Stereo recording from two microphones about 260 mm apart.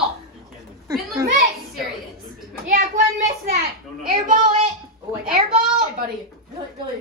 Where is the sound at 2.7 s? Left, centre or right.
Right.